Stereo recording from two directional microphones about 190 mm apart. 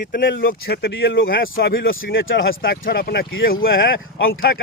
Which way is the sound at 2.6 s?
55° left (ahead or behind).